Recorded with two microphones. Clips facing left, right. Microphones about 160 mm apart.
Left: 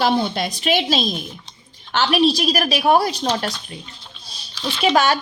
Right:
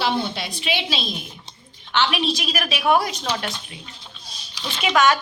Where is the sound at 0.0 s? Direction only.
45° left (ahead or behind).